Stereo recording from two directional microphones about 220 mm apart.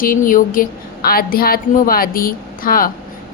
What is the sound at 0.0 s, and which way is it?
A woman's voice, 40° left (ahead or behind).